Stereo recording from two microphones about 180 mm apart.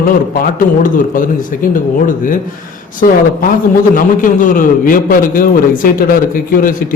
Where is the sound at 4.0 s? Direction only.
50° left (ahead or behind).